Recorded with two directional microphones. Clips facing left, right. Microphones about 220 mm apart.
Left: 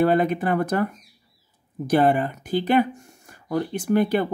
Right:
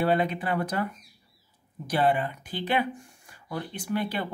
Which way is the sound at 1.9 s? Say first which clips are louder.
Left 6 dB; 45° left (ahead or behind).